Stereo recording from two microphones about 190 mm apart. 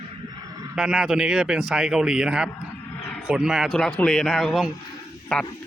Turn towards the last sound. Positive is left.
turn(degrees=5)  # may be behind; listen again after turning